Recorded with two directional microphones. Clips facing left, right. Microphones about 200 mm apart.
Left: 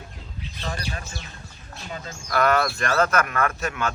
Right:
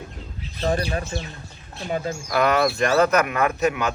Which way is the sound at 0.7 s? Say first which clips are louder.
Right 10 dB; 30° right (ahead or behind).